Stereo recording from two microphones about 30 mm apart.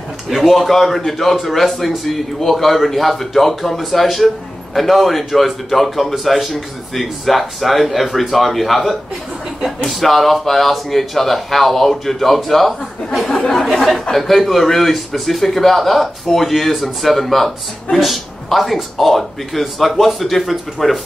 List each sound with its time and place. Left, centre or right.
0.3 s speech: centre
13.3 s speech: centre
14.1 s speech: centre